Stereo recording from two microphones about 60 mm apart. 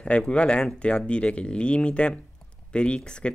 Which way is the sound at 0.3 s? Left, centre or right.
Centre.